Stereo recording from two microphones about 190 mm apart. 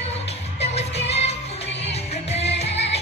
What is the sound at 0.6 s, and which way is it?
Music, 35° left (ahead or behind).